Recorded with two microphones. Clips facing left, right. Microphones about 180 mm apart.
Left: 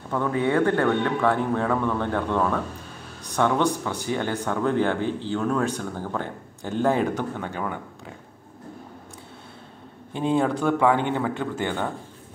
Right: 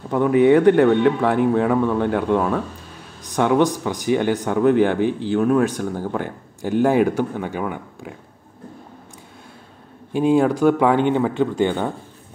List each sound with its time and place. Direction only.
0.1 s speech: 15° right (ahead or behind)
10.1 s speech: 10° right (ahead or behind)